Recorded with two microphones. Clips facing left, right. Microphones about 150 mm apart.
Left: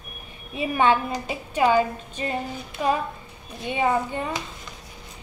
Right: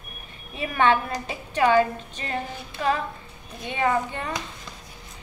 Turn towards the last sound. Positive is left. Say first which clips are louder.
# left 1 dB
turn(degrees=10)  # may be behind; listen again after turning